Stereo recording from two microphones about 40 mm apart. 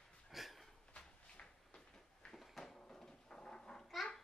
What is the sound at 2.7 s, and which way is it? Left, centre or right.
Cat, centre.